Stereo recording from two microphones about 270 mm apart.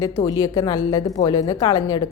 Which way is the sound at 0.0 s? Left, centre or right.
Centre.